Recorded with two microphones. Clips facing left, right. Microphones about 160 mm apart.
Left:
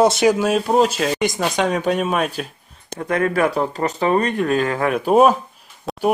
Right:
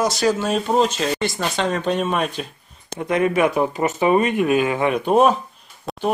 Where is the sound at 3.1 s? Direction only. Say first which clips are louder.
Right 1 dB; 15° right (ahead or behind).